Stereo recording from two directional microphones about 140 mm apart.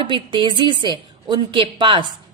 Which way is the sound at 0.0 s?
35° right (ahead or behind).